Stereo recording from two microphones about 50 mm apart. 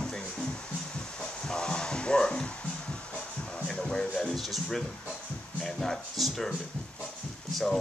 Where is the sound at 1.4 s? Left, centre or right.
Centre.